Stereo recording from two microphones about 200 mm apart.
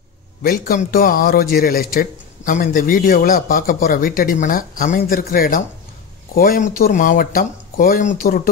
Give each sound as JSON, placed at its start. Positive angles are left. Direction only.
{"t": 0.4, "sound": "a man's voice", "side_deg": 45}